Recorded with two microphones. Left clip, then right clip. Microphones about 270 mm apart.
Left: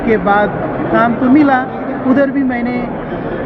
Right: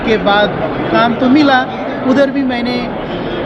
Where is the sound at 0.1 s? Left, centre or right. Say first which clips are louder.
Right 1 dB; right.